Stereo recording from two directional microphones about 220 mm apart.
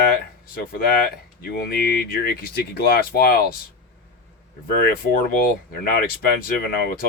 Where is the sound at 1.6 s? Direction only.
45° left (ahead or behind).